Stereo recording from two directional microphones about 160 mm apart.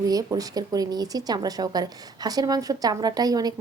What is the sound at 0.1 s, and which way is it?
A woman's voice, 20° right (ahead or behind).